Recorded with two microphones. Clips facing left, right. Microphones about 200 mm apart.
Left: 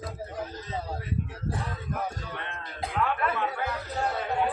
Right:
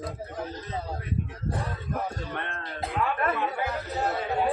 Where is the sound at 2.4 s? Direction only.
55° right (ahead or behind).